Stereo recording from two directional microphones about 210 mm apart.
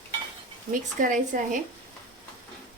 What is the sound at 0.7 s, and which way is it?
Speech, 40° right (ahead or behind).